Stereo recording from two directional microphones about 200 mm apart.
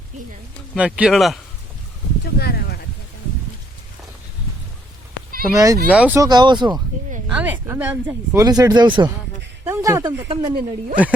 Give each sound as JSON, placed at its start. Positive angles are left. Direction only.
{"t": 0.8, "sound": "speech", "side_deg": -5}
{"t": 2.2, "sound": "a sound", "side_deg": 50}
{"t": 5.5, "sound": "speech", "side_deg": -15}
{"t": 6.1, "sound": "speech", "side_deg": -20}
{"t": 7.3, "sound": "speech", "side_deg": -5}